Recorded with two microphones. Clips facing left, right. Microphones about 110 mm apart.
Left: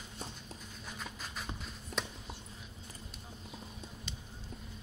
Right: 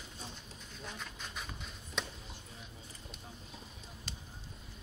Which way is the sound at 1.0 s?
Centre (ahead or behind).